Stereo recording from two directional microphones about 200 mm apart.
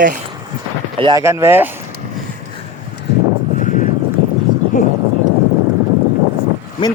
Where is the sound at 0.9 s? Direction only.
25° right (ahead or behind).